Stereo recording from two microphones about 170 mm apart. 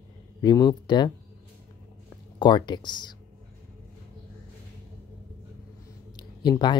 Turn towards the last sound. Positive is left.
turn(degrees=25)  # may be behind; listen again after turning